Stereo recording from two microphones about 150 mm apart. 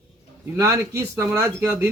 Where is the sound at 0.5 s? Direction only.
15° right (ahead or behind).